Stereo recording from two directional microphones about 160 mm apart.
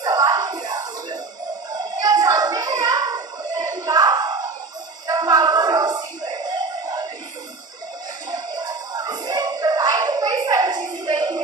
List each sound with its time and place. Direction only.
0.0 s music: 25° right (ahead or behind)
1.7 s a sound: 25° right (ahead or behind)
5.0 s music: 25° right (ahead or behind)
8.3 s music: 25° right (ahead or behind)